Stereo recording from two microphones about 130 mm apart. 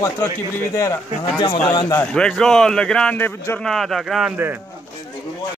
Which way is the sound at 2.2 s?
5° left (ahead or behind).